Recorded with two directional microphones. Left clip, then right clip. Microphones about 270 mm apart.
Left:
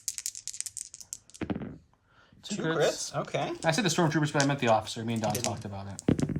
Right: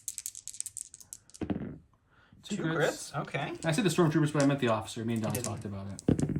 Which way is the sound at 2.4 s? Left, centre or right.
Centre.